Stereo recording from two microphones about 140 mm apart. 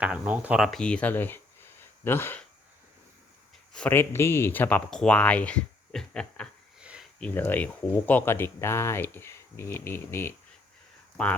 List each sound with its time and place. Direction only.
0.0 s speech: 10° right (ahead or behind)
0.6 s speech: 5° left (ahead or behind)
1.8 s a sound: 15° left (ahead or behind)
3.7 s speech: 10° left (ahead or behind)
6.7 s sniff: 5° right (ahead or behind)
7.2 s speech: 15° left (ahead or behind)